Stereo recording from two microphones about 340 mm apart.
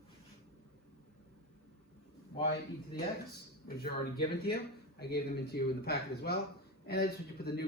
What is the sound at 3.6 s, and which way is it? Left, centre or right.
Speech, left.